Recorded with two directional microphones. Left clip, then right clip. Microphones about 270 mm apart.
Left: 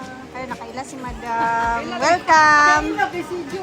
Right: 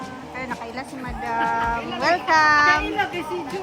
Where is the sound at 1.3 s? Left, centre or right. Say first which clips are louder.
Left 3 dB; centre.